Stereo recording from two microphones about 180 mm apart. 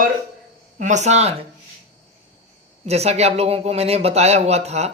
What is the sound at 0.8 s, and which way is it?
Speech, 40° right (ahead or behind).